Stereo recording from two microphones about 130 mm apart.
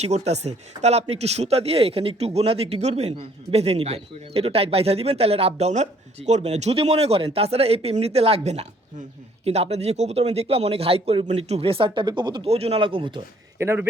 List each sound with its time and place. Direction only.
0.0 s speech: 55° right (ahead or behind); by 12.4 s 35° right (ahead or behind)
12.5 s speech: 50° right (ahead or behind)
13.6 s speech: 20° right (ahead or behind)